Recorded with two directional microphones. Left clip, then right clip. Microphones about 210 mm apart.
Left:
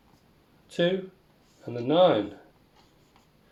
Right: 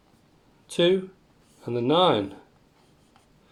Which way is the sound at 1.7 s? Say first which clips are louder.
Even; 50° right (ahead or behind).